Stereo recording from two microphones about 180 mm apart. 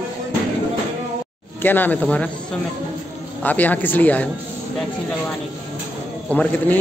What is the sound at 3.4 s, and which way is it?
Speech, 10° left (ahead or behind).